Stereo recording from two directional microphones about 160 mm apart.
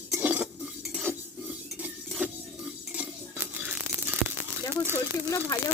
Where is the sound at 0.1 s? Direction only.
10° right (ahead or behind).